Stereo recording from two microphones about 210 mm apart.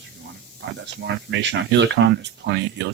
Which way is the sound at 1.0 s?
55° right (ahead or behind).